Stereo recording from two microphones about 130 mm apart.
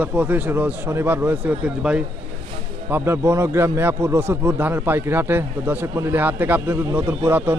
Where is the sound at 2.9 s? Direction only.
20° right (ahead or behind).